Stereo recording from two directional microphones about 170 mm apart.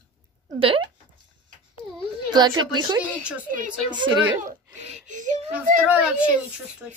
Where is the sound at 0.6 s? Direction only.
30° right (ahead or behind).